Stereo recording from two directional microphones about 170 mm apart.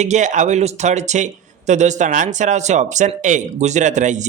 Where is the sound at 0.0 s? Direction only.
45° right (ahead or behind).